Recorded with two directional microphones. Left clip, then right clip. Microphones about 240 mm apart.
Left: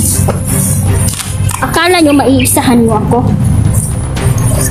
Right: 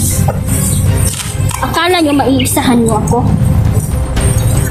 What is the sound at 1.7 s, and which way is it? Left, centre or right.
A woman's voice, left.